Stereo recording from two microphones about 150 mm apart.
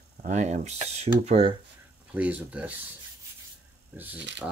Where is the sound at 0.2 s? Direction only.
50° right (ahead or behind).